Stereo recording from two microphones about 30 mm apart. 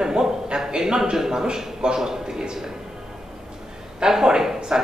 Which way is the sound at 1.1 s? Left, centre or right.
Centre.